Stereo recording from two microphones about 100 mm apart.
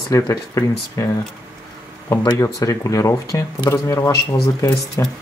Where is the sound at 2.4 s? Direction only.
35° left (ahead or behind).